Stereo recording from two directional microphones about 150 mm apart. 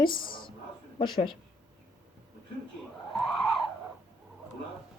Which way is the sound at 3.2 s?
Centre (ahead or behind).